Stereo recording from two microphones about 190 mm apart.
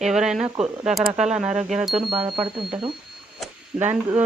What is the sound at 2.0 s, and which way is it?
Speech, 25° right (ahead or behind).